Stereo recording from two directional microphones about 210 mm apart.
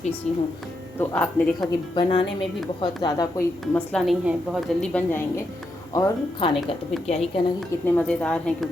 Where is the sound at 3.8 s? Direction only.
Centre (ahead or behind).